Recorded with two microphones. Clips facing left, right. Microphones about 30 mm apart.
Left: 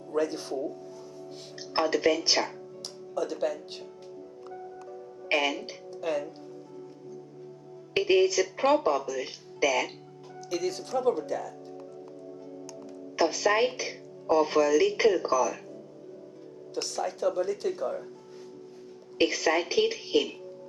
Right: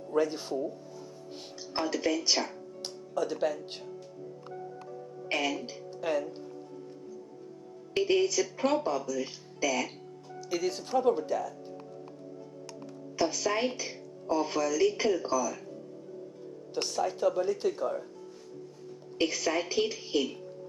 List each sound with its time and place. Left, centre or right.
0.1 s speech: centre
1.8 s speech: centre
3.2 s speech: centre
4.5 s music: centre
5.3 s speech: centre
6.0 s speech: centre
7.9 s speech: centre
10.5 s speech: centre
13.1 s speech: centre
16.7 s speech: centre
19.2 s speech: centre